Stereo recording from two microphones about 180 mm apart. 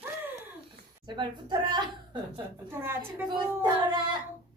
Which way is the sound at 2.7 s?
15° right (ahead or behind).